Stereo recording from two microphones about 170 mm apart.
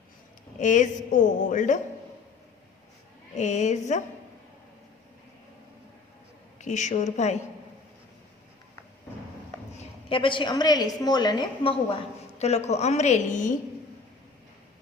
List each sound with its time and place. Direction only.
0.6 s a woman's voice: 45° left (ahead or behind)
3.3 s a woman's voice: 45° left (ahead or behind)
6.6 s a woman's voice: 45° left (ahead or behind)
9.7 s a woman's voice: 30° left (ahead or behind); by 13.5 s 45° left (ahead or behind)